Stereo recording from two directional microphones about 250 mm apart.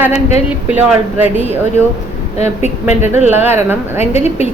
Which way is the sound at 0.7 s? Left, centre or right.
Centre.